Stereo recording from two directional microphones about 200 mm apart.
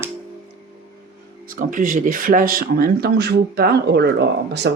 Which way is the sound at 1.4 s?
45° right (ahead or behind).